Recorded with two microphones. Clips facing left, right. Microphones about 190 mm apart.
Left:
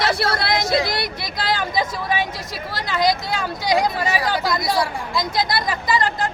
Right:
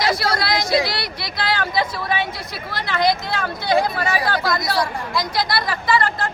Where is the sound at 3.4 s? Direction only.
15° left (ahead or behind).